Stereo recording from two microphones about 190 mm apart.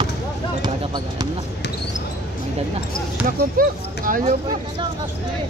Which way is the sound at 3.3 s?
45° right (ahead or behind).